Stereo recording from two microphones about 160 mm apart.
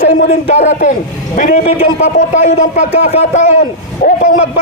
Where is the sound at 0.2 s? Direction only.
45° left (ahead or behind).